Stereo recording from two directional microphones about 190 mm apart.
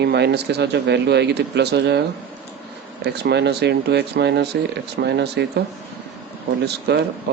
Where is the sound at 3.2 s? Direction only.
60° right (ahead or behind).